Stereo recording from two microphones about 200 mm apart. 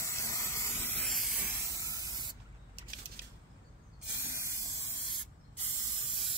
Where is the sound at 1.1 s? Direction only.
5° right (ahead or behind); by 2.4 s 20° right (ahead or behind).